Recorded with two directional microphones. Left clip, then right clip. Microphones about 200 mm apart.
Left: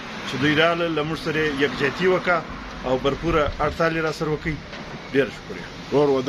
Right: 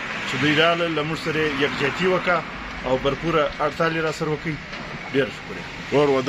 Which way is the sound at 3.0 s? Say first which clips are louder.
Even; 15° left (ahead or behind).